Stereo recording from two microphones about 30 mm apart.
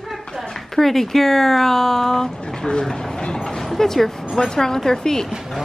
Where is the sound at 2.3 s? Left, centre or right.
Left.